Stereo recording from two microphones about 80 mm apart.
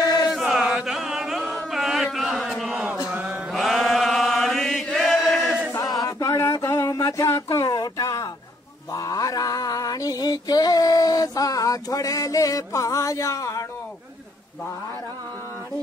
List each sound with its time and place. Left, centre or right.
0.0 s chant: left
0.3 s chant: centre
3.1 s mantra: centre
3.5 s chant: centre
5.8 s a sound: left
7.5 s a sound: left
8.9 s music: left